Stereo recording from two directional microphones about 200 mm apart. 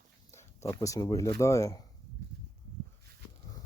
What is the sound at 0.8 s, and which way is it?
Speech, 15° left (ahead or behind).